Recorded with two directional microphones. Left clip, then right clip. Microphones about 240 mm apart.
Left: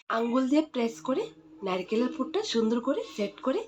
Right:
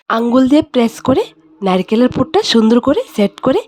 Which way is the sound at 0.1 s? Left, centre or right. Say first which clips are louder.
Right 15 dB; right.